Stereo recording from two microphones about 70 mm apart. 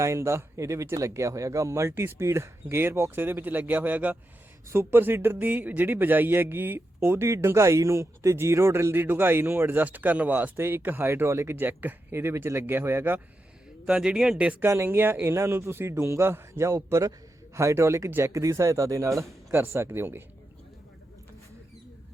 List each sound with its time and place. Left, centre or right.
0.0 s a man's voice: right
13.8 s speech: centre
14.8 s a man's voice: right